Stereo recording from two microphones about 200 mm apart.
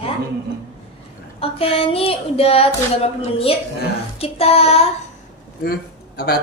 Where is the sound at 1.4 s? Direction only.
30° left (ahead or behind).